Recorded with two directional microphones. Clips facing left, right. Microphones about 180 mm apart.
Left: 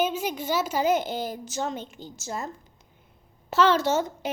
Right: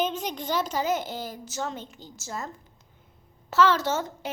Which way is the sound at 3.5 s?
20° left (ahead or behind).